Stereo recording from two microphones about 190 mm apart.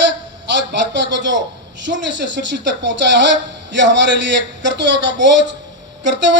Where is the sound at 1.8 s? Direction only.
70° right (ahead or behind).